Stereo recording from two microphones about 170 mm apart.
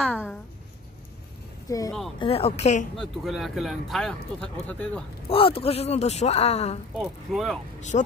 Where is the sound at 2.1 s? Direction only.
35° left (ahead or behind).